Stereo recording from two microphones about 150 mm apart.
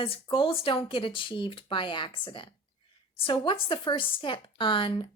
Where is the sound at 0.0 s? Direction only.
35° left (ahead or behind).